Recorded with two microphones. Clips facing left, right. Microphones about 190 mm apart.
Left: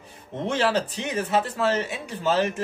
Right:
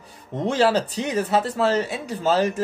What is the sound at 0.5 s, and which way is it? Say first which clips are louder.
Speech: right 4 dB; 35° right (ahead or behind).